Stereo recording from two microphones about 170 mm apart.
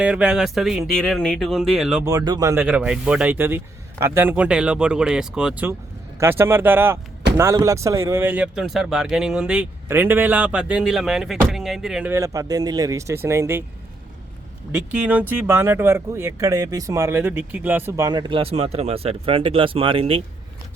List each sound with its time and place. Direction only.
0.0 s speech: 5° right (ahead or behind)
2.0 s speech: 20° right (ahead or behind); by 12.1 s 5° right (ahead or behind)
12.1 s speech: 20° right (ahead or behind)
14.7 s speech: 10° right (ahead or behind); by 20.2 s 35° right (ahead or behind)